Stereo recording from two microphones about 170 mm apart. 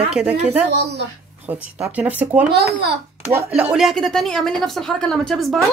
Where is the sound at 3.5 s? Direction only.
5° right (ahead or behind).